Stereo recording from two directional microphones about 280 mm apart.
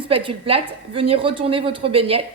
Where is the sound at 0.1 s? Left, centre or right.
Centre.